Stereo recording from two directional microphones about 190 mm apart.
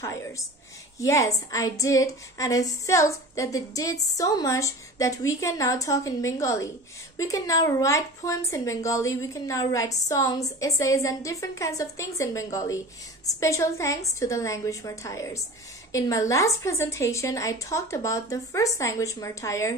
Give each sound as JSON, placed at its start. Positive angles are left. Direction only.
{"t": 0.9, "sound": "a woman's voice", "side_deg": 15}